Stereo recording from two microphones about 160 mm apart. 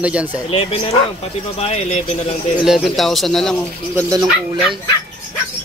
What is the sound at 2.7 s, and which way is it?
Speech, centre (ahead or behind).